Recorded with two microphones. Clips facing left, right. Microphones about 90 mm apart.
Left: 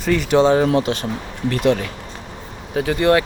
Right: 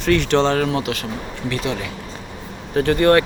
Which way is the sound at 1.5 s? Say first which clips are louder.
Left 7 dB; 55° left (ahead or behind).